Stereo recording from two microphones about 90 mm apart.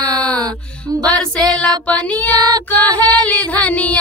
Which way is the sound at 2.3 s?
50° right (ahead or behind).